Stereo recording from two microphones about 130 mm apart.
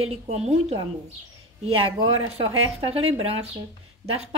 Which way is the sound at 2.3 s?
45° right (ahead or behind).